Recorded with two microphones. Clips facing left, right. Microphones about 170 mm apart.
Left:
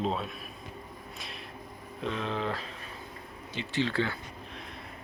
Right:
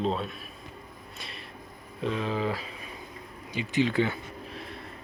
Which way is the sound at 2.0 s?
Centre (ahead or behind).